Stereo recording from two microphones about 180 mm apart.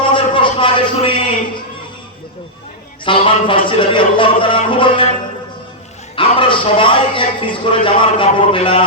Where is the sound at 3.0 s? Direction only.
30° left (ahead or behind).